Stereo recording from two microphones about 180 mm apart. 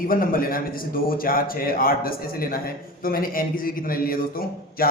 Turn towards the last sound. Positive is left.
turn(degrees=55)  # may be behind; listen again after turning